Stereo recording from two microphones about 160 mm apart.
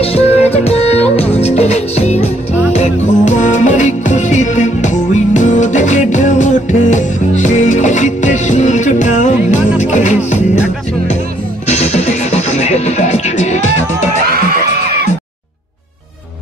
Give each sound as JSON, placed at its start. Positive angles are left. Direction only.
{"t": 0.0, "sound": "music", "side_deg": 40}
{"t": 11.6, "sound": "music", "side_deg": 45}